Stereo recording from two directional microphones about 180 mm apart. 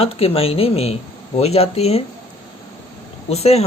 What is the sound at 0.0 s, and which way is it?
Speech, 35° left (ahead or behind).